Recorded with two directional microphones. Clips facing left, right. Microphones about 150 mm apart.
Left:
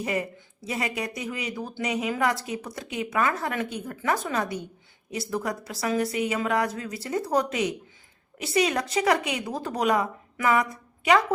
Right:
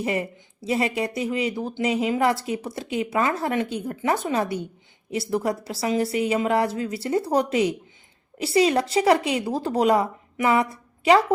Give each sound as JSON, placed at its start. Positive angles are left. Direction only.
{"t": 0.0, "sound": "a woman's voice", "side_deg": -30}